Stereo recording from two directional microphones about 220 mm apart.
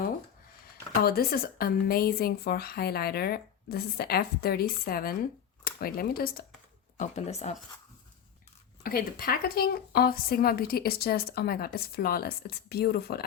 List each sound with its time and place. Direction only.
1.0 s a woman's voice: 45° left (ahead or behind)
6.9 s speech: 35° left (ahead or behind)
8.8 s a woman's voice: 40° left (ahead or behind)